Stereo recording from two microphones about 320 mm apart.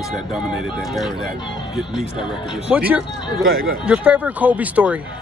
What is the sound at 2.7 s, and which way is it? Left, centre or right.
Speech, centre.